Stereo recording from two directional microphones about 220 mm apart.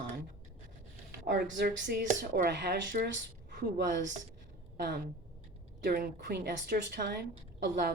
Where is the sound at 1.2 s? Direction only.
55° right (ahead or behind).